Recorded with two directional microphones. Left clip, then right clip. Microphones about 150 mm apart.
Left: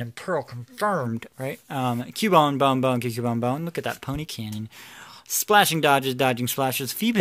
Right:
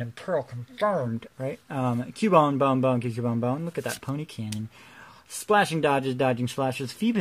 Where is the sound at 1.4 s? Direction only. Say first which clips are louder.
Left 2 dB; 15° left (ahead or behind).